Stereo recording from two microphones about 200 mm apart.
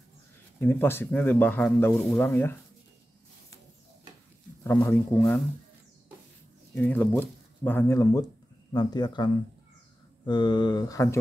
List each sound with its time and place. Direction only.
0.6 s speech: 10° left (ahead or behind)
4.6 s speech: 10° left (ahead or behind)
6.7 s speech: 10° left (ahead or behind)